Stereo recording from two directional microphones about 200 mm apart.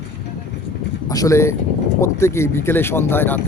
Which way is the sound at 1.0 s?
15° left (ahead or behind).